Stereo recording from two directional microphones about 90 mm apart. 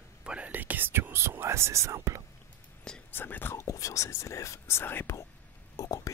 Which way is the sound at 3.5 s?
35° left (ahead or behind).